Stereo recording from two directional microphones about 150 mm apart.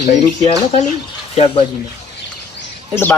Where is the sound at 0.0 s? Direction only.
50° left (ahead or behind).